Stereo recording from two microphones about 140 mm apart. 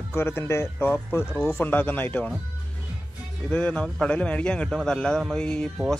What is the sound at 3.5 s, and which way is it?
A man's voice, 10° left (ahead or behind).